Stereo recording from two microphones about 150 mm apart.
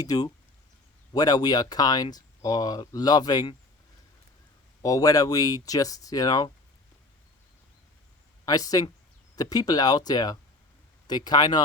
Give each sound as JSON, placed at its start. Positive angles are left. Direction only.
{"t": 0.0, "sound": "speech", "side_deg": 25}
{"t": 4.8, "sound": "speech", "side_deg": 25}
{"t": 8.4, "sound": "speech", "side_deg": 25}